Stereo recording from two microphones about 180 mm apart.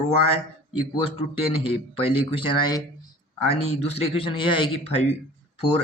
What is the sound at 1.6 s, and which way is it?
A man's voice, 30° left (ahead or behind).